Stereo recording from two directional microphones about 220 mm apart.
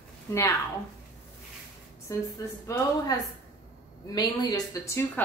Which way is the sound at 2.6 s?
15° left (ahead or behind).